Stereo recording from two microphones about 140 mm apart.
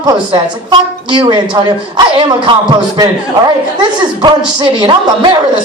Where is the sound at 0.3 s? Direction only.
35° right (ahead or behind).